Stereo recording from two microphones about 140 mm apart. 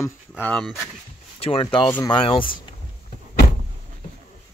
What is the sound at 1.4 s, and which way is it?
Speech, 40° left (ahead or behind).